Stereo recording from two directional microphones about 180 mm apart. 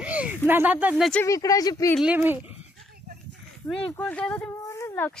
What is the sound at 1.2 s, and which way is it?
Speech, 20° left (ahead or behind).